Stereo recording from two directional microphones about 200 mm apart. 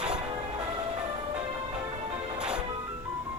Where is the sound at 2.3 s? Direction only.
5° right (ahead or behind).